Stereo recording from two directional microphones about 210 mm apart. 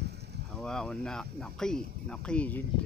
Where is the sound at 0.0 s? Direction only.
50° right (ahead or behind).